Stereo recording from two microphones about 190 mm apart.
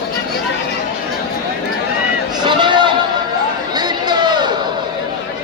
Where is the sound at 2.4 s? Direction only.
25° right (ahead or behind).